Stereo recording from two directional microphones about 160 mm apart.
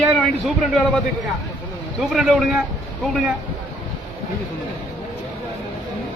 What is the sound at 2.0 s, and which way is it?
Speech, centre (ahead or behind).